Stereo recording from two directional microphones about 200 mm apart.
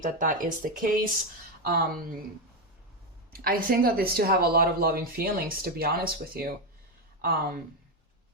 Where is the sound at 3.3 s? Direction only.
45° right (ahead or behind).